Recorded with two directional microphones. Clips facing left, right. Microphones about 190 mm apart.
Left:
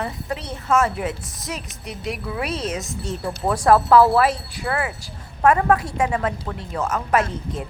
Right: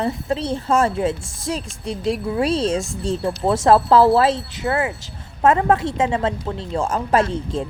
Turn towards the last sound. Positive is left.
turn(degrees=-30)  # may be behind; listen again after turning